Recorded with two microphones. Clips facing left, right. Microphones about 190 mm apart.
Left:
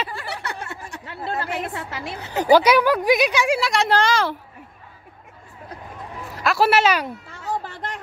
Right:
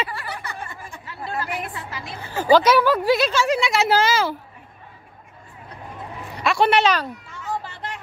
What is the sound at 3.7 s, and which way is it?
Speech, 5° right (ahead or behind).